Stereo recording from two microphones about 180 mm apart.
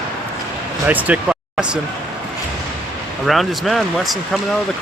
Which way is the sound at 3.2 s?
Centre (ahead or behind).